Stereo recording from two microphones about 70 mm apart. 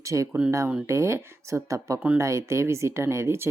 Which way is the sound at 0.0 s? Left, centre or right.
Right.